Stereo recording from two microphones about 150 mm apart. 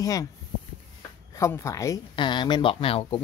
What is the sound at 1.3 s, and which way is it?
Speech, 20° left (ahead or behind).